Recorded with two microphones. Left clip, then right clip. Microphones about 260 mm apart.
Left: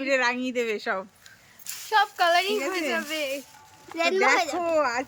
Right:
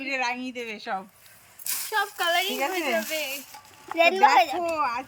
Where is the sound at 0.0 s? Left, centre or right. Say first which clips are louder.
Left 4 dB; centre.